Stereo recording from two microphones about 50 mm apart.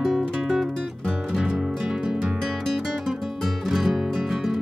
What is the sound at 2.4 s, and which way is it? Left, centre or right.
Music, centre.